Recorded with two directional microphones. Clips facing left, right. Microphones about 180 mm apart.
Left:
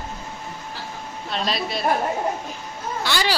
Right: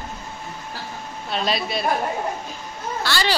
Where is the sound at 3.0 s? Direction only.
15° left (ahead or behind).